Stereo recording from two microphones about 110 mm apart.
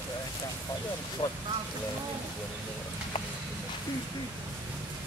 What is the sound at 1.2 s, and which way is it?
Speech, 45° left (ahead or behind).